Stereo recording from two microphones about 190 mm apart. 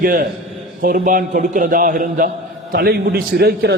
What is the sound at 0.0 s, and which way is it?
A man's voice, 50° right (ahead or behind).